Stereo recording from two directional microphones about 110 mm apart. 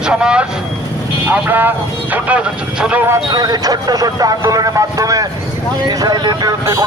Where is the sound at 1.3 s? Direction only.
15° right (ahead or behind).